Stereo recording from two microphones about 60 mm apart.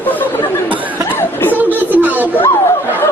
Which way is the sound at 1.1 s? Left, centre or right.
Left.